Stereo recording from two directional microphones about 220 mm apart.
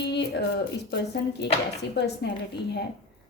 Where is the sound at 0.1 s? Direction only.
50° left (ahead or behind).